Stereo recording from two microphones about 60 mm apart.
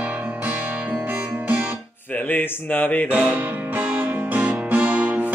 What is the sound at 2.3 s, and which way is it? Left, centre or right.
Speech, left.